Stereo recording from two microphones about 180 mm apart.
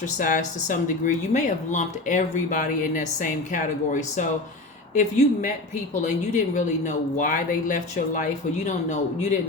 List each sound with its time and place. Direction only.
0.0 s speech: 45° left (ahead or behind)
4.9 s speech: 40° left (ahead or behind)